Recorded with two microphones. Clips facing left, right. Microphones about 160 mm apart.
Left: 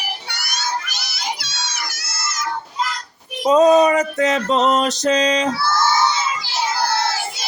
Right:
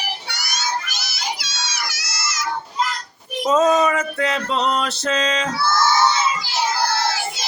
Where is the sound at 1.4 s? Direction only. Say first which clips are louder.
Even; 55° left (ahead or behind).